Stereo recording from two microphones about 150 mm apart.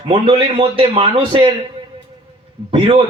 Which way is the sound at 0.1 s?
35° right (ahead or behind).